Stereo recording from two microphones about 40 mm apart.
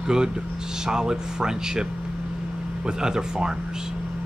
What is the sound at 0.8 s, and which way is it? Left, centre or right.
Speech, centre.